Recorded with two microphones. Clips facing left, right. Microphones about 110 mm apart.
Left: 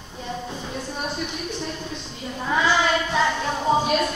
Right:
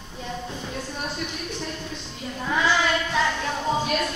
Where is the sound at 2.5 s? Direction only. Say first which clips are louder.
Left 2 dB; 15° left (ahead or behind).